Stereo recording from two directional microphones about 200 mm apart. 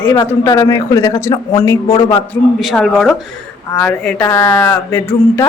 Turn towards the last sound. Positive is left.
turn(degrees=10)  # may be behind; listen again after turning